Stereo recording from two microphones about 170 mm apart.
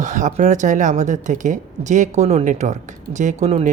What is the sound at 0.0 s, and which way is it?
Speech, 45° right (ahead or behind).